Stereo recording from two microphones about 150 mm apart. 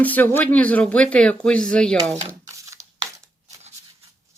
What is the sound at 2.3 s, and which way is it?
Shuffling cards, 20° right (ahead or behind).